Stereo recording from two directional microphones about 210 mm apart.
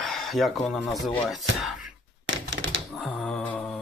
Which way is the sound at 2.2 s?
65° right (ahead or behind).